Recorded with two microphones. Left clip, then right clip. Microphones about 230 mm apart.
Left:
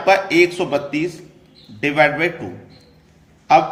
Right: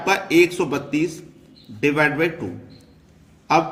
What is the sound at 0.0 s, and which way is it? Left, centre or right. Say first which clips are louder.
A man's voice: left 3 dB; right.